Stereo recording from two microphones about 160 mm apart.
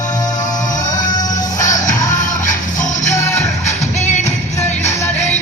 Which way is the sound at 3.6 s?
45° left (ahead or behind).